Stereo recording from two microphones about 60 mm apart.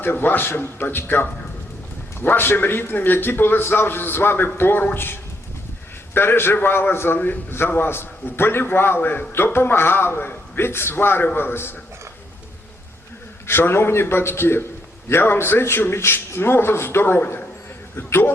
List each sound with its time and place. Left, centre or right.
0.0 s a man's voice: left
13.5 s a man's voice: left